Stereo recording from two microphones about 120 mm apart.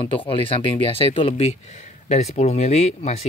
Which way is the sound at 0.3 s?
45° left (ahead or behind).